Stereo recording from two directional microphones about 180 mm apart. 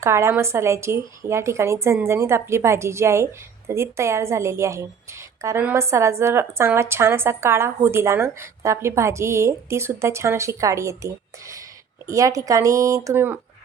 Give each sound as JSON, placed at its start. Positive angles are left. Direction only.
{"t": 0.0, "sound": "a woman's voice", "side_deg": -15}